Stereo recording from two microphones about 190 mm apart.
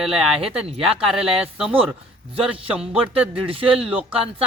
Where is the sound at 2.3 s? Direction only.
30° right (ahead or behind).